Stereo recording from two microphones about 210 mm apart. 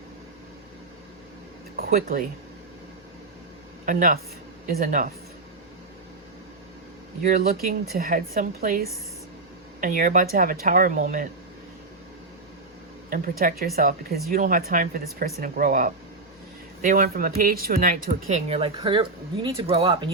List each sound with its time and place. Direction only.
1.7 s speech: 45° right (ahead or behind)
3.8 s speech: 40° right (ahead or behind)
7.2 s a woman's voice: 45° right (ahead or behind)
13.1 s a woman's voice: 40° right (ahead or behind); by 20.1 s 25° right (ahead or behind)